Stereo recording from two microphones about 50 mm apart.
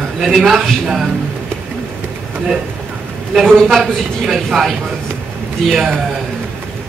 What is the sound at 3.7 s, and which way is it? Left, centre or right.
A man's voice, centre.